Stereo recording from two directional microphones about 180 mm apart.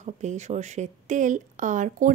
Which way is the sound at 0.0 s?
40° right (ahead or behind).